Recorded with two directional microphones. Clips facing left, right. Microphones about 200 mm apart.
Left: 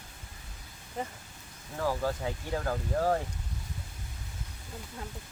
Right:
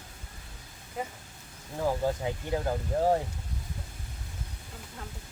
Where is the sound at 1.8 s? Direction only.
20° right (ahead or behind).